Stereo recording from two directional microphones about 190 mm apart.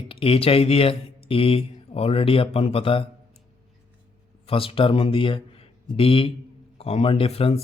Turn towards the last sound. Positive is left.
turn(degrees=30)  # may be behind; listen again after turning